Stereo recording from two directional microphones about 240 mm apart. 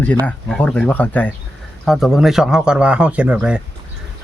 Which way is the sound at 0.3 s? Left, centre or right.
Centre.